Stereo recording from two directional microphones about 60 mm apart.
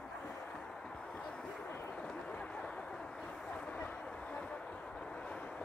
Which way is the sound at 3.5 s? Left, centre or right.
Left.